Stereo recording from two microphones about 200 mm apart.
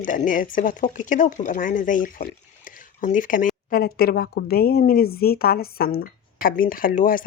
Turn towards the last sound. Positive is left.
turn(degrees=45)  # may be behind; listen again after turning